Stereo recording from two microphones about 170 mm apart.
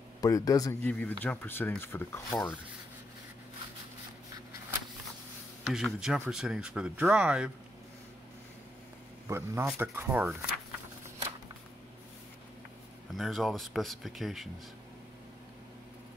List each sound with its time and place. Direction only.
0.2 s a man's voice: 20° left (ahead or behind)
0.8 s speech: 10° left (ahead or behind)
5.7 s speech: centre (ahead or behind)
9.3 s speech: 15° right (ahead or behind)
13.1 s speech: centre (ahead or behind)